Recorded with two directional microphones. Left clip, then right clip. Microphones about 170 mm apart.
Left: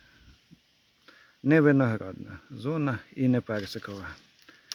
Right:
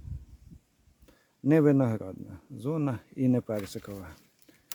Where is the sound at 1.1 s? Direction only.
5° right (ahead or behind).